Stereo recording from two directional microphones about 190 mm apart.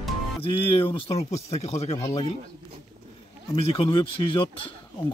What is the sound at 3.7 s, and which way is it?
Speech, 30° left (ahead or behind).